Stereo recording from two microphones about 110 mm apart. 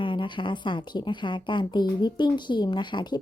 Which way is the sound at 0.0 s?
50° left (ahead or behind).